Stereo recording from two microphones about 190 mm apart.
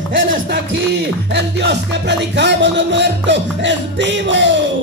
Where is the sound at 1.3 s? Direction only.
65° right (ahead or behind).